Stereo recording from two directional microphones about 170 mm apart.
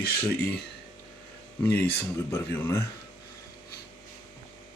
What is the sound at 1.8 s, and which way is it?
Speech, 10° left (ahead or behind).